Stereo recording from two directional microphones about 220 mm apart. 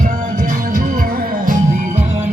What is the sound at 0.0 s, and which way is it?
Music, 35° right (ahead or behind).